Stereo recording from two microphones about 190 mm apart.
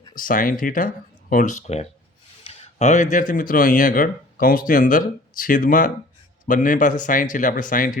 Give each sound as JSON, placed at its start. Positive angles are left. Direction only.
{"t": 0.1, "sound": "speech", "side_deg": 45}